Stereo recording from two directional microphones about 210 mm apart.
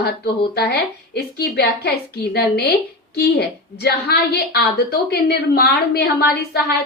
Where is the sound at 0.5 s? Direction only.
50° left (ahead or behind).